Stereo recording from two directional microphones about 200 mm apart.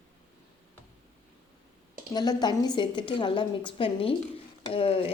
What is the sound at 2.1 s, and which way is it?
A woman's voice, 20° left (ahead or behind).